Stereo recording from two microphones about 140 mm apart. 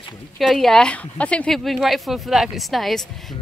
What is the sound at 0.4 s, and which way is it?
A woman's voice, centre (ahead or behind).